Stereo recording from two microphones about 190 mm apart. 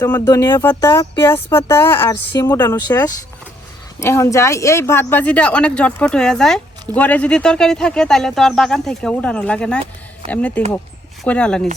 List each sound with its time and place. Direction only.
0.0 s speech: 15° left (ahead or behind)